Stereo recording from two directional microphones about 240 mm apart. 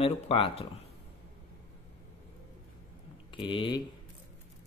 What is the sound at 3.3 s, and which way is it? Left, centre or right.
Speech, left.